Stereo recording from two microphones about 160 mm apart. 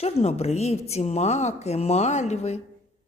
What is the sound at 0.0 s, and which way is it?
A man's voice, 40° left (ahead or behind).